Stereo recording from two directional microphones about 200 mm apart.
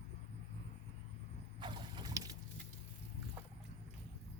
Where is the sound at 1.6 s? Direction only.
25° right (ahead or behind).